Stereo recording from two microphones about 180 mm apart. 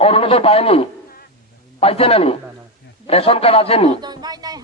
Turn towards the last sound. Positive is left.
turn(degrees=-20)  # may be behind; listen again after turning